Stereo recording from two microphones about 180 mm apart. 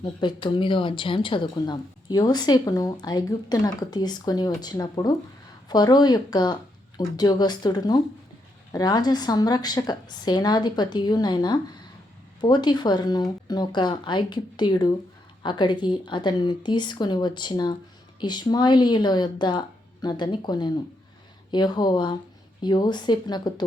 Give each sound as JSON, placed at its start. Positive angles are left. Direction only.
{"t": 0.0, "sound": "a woman's voice", "side_deg": 25}